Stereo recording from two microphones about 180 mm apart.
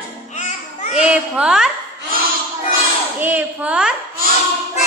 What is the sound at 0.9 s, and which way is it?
Speech, 5° right (ahead or behind).